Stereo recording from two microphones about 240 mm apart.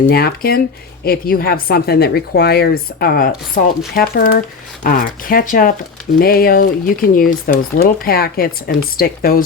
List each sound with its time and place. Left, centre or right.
0.1 s speech: left